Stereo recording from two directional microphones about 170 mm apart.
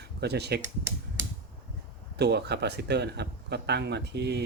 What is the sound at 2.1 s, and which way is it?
A man's voice, 75° right (ahead or behind).